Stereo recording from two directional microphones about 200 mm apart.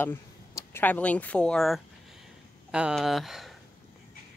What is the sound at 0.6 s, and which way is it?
Speech, 10° left (ahead or behind).